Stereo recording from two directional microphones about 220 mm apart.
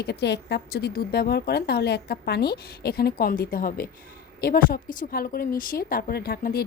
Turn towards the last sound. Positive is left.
turn(degrees=45)  # may be behind; listen again after turning